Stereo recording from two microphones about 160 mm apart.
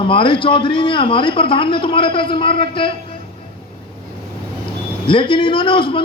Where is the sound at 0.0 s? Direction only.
30° left (ahead or behind).